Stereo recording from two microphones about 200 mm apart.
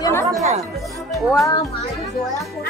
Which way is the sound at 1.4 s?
15° left (ahead or behind).